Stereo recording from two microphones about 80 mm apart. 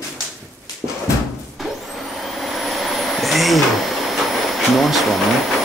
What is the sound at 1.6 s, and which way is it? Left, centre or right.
Vehicle, centre.